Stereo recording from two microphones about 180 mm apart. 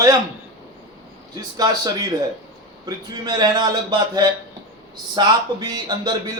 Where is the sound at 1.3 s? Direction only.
20° right (ahead or behind).